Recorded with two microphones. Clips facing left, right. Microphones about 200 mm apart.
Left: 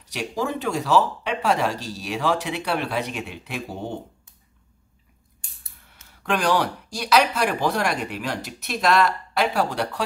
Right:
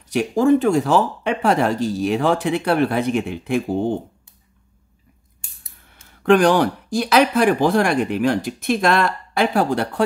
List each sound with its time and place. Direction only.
0.1 s speech: 50° right (ahead or behind)
6.3 s speech: 50° right (ahead or behind)